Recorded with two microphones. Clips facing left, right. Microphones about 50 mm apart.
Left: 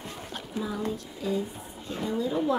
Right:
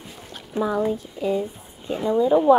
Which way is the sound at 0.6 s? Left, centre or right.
Right.